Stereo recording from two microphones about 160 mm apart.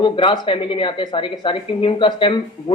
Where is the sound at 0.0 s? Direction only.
30° left (ahead or behind).